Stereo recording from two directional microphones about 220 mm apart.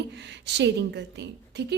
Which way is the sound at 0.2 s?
50° right (ahead or behind).